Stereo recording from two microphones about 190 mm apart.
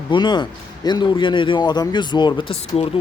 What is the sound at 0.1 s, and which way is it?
Speech, 25° left (ahead or behind).